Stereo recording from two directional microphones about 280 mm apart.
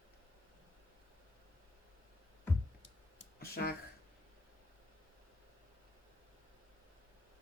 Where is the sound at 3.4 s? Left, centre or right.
Left.